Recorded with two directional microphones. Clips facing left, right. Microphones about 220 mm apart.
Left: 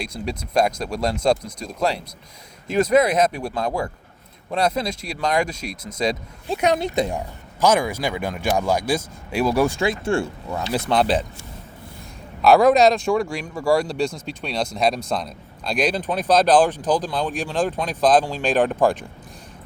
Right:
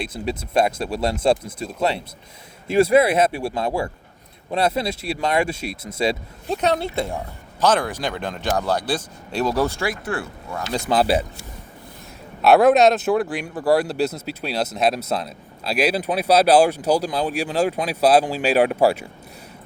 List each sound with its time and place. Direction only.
0.0 s speech: 5° right (ahead or behind)
6.6 s speech: 15° left (ahead or behind)
10.7 s speech: centre (ahead or behind)
12.4 s speech: centre (ahead or behind)